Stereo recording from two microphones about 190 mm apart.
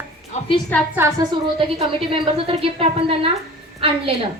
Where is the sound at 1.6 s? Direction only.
30° right (ahead or behind).